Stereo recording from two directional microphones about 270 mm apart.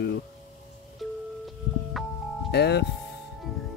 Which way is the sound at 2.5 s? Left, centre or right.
Left.